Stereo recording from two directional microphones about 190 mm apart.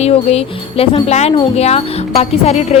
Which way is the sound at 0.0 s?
35° left (ahead or behind).